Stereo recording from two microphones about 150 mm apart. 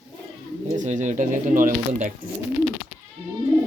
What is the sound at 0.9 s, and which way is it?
Speech, 55° right (ahead or behind).